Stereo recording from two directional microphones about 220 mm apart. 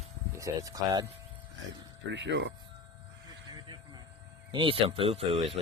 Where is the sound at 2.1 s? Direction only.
55° right (ahead or behind).